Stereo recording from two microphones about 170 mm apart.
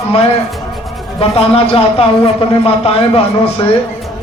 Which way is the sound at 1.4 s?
35° left (ahead or behind).